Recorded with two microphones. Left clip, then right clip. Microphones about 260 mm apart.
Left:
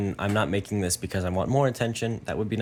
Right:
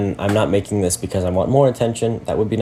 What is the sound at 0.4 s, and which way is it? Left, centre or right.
Speech, left.